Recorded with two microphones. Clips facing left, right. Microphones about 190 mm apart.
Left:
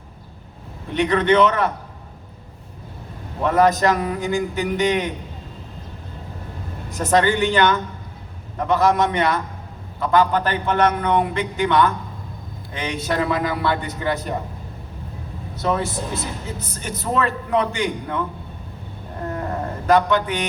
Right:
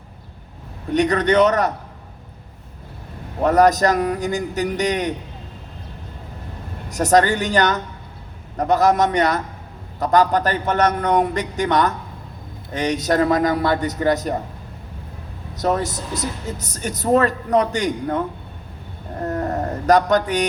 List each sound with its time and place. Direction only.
0.9 s speech: 40° right (ahead or behind)
3.4 s speech: 40° right (ahead or behind)
6.9 s speech: 40° right (ahead or behind)
15.5 s speech: 40° right (ahead or behind)
19.2 s a sound: 40° right (ahead or behind)